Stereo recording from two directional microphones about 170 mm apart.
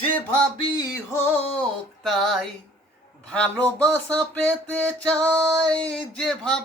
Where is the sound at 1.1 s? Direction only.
5° left (ahead or behind).